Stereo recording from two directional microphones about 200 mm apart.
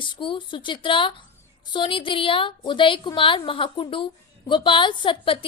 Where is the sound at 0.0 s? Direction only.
25° left (ahead or behind).